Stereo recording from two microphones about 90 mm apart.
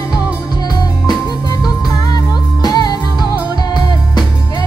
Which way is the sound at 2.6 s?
50° left (ahead or behind).